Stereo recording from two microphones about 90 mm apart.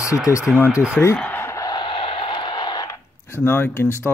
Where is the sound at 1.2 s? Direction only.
25° left (ahead or behind).